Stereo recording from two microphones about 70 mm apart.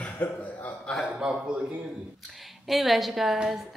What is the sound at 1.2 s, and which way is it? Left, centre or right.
Speech, centre.